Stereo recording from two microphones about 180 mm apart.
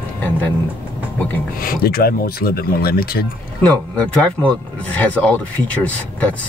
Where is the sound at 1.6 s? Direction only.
55° left (ahead or behind).